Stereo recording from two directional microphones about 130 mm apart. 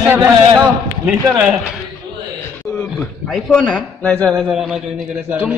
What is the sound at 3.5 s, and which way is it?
Speech, 10° left (ahead or behind).